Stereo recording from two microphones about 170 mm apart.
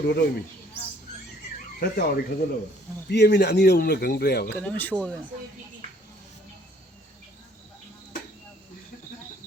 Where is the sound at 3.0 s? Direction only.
80° left.